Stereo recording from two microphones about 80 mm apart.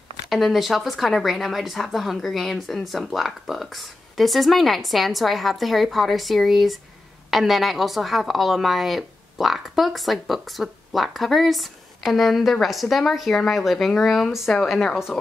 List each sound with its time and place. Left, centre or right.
0.3 s a woman's voice: centre